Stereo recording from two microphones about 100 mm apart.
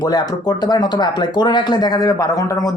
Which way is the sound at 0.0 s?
40° left (ahead or behind).